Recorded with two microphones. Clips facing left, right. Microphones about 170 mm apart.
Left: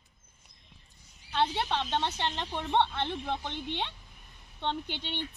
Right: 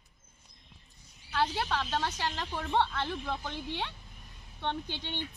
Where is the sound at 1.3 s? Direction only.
25° left (ahead or behind).